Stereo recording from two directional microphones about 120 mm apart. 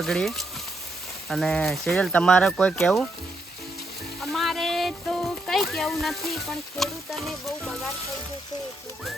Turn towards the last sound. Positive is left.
turn(degrees=0)  # may be behind; listen again after turning